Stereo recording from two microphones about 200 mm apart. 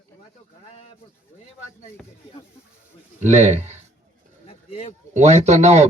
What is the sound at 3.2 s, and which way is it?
Speech, 35° right (ahead or behind).